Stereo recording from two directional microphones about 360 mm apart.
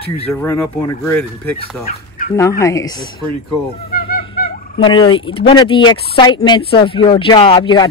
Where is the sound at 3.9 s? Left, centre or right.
Left.